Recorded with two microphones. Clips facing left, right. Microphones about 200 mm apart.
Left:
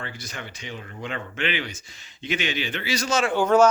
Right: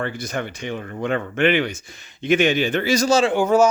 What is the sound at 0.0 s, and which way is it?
Speech, 55° right (ahead or behind).